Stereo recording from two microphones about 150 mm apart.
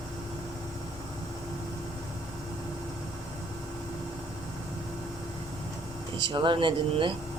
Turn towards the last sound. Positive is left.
turn(degrees=-35)  # may be behind; listen again after turning